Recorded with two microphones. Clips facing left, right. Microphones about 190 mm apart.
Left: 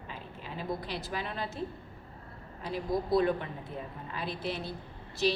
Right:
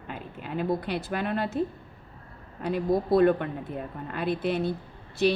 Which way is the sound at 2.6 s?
55° right (ahead or behind).